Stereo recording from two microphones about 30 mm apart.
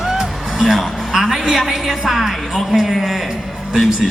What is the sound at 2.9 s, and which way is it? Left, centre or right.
Speech, centre.